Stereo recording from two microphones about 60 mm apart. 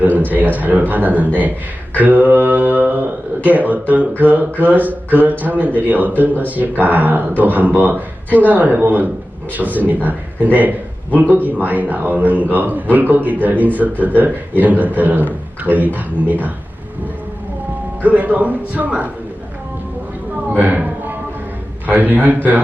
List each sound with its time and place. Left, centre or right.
0.3 s speech: right
2.0 s mantra: right
3.4 s speech: right
18.0 s speech: right
20.6 s a woman's voice: right